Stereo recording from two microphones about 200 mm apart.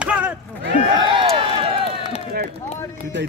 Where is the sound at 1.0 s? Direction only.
25° right (ahead or behind).